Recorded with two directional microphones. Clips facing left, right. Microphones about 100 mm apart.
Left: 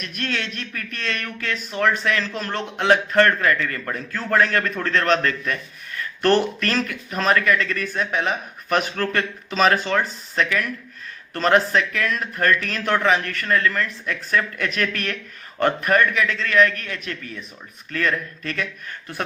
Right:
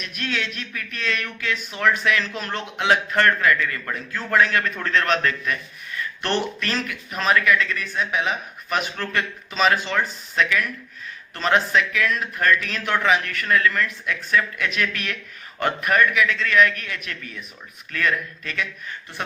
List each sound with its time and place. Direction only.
0.0 s speech: 40° left (ahead or behind)